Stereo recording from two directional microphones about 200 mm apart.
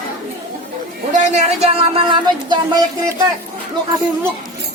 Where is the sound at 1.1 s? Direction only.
35° right (ahead or behind).